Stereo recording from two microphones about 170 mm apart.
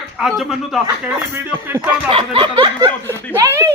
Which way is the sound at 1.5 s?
10° right (ahead or behind).